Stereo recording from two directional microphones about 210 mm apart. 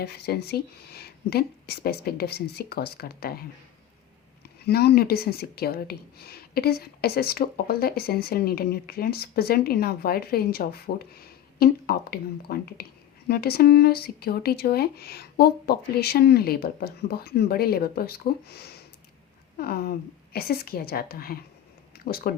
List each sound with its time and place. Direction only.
0.0 s speech: 50° left (ahead or behind)
4.6 s speech: 50° left (ahead or behind)